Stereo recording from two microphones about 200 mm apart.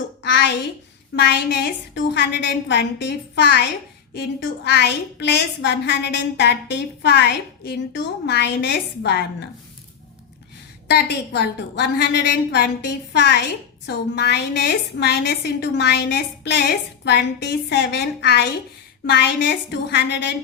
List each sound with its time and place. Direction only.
0.3 s a sound: 60° left (ahead or behind)
1.1 s a woman's voice: 60° left (ahead or behind)
10.8 s a woman's voice: 55° left (ahead or behind)